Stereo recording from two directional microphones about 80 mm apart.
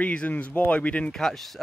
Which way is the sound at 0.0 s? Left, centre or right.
Centre.